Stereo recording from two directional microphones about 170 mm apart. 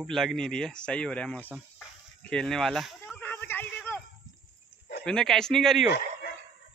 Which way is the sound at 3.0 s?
10° left (ahead or behind).